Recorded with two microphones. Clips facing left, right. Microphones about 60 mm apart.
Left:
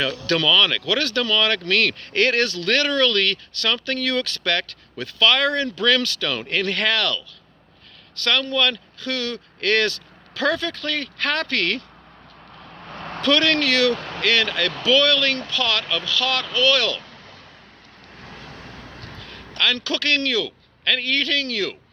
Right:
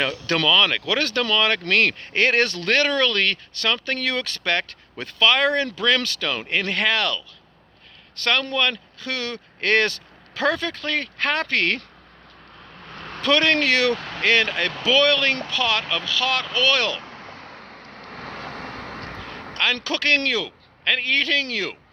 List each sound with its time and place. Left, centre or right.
0.0 s speech: right
12.6 s vehicle: centre
12.9 s vehicle: left
13.2 s speech: right
17.2 s vehicle: right
19.5 s speech: right